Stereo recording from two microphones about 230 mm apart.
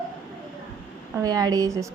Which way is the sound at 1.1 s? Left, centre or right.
Centre.